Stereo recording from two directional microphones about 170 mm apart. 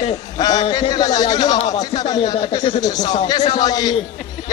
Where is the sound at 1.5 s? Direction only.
40° left (ahead or behind).